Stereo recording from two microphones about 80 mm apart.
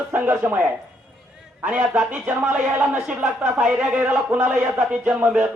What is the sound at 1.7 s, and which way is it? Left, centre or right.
A man's voice, centre.